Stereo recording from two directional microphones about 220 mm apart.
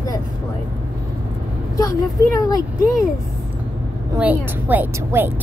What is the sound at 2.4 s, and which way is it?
Speech, 15° left (ahead or behind).